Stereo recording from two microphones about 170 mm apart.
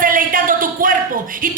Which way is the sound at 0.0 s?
55° right (ahead or behind).